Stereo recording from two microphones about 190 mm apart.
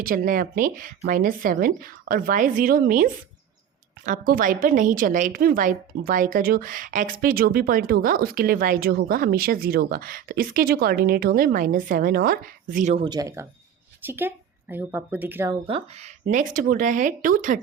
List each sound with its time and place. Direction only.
0.0 s a woman's voice: 50° right (ahead or behind)
13.1 s a woman's voice: 20° right (ahead or behind)
15.6 s a woman's voice: 30° right (ahead or behind)